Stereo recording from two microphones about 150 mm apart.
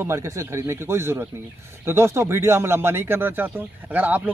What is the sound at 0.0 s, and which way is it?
Speech, 20° right (ahead or behind).